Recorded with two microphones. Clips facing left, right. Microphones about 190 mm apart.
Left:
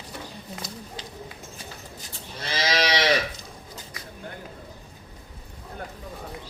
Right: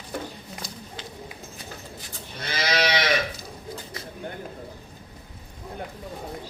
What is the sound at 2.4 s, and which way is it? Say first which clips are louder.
Sheep: even; 35° left (ahead or behind).